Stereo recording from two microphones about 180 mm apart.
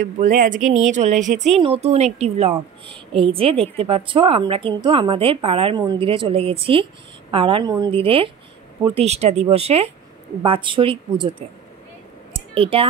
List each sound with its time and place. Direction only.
0.0 s a woman's voice: 45° right (ahead or behind); by 11.4 s 30° right (ahead or behind)
12.5 s speech: 30° right (ahead or behind)